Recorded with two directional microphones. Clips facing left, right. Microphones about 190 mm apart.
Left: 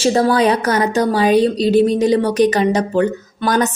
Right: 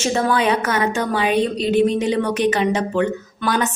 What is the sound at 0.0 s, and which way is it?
A woman's voice, 35° left (ahead or behind).